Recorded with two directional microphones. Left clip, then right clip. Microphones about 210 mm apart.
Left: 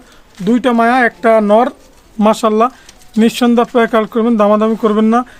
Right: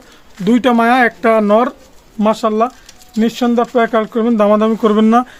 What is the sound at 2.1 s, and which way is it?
Speech, 25° left (ahead or behind).